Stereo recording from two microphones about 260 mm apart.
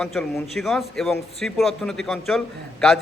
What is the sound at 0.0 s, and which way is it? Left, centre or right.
A man's voice, centre.